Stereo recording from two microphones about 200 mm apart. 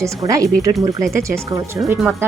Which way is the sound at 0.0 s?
15° right (ahead or behind).